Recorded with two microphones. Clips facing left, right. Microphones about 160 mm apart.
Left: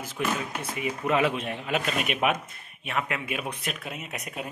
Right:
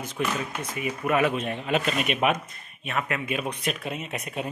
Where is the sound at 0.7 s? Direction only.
20° left (ahead or behind).